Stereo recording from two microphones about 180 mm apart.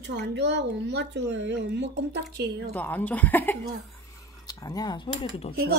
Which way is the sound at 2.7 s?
10° left (ahead or behind).